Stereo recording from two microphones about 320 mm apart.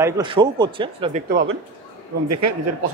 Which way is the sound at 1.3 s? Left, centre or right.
Right.